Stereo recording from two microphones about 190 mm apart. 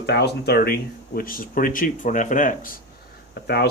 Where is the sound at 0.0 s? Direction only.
60° left (ahead or behind); by 2.7 s 45° left (ahead or behind).